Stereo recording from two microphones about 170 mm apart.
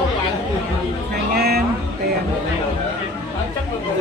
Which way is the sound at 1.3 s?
70° right (ahead or behind).